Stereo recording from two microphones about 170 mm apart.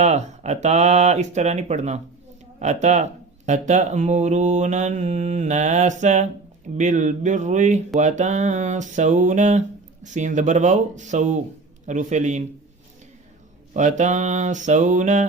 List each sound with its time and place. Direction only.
0.0 s speech: 40° right (ahead or behind)
13.7 s speech: 45° right (ahead or behind)